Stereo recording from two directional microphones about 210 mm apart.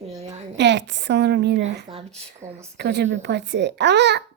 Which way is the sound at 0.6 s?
55° right (ahead or behind).